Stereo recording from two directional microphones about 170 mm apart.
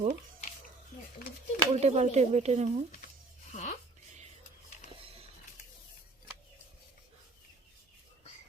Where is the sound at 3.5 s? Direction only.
45° left (ahead or behind).